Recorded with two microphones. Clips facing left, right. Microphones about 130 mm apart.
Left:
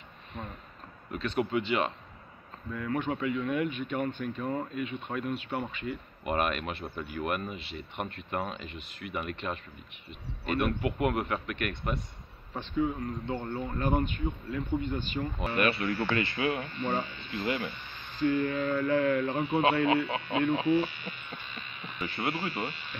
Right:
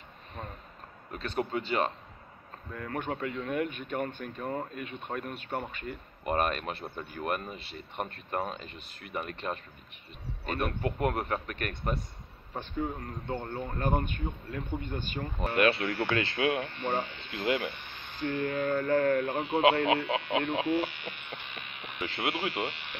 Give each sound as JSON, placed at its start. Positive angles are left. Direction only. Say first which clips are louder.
{"t": 1.1, "sound": "speech", "louder": "left 3 dB", "side_deg": -40}
{"t": 15.5, "sound": "speech", "louder": "right 2 dB", "side_deg": -70}
{"t": 20.1, "sound": "speech", "louder": "left 1 dB", "side_deg": -70}